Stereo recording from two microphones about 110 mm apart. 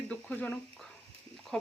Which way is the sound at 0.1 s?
10° left (ahead or behind).